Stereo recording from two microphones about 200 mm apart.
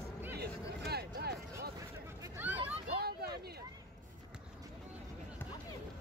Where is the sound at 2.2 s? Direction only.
10° right (ahead or behind).